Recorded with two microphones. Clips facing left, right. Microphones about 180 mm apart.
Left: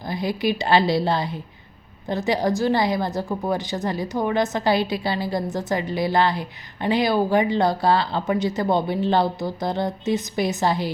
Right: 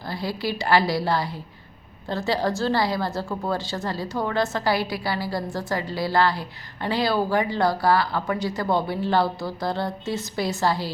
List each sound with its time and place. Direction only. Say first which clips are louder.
0.1 s a woman's voice: left 5 dB; 20° left (ahead or behind)